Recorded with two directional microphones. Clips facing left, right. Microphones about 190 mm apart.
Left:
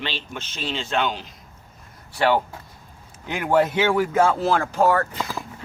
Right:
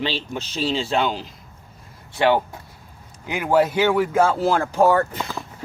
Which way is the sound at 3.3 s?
5° right (ahead or behind).